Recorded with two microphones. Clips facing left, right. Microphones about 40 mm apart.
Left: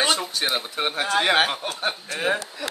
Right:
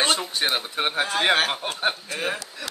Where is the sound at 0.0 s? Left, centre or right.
Centre.